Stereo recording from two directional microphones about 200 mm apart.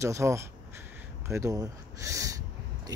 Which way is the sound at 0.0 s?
15° right (ahead or behind).